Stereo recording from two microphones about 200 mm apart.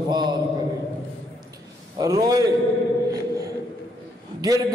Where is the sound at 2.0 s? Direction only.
15° right (ahead or behind).